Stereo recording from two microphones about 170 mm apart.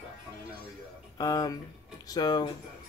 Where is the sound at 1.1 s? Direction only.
20° left (ahead or behind).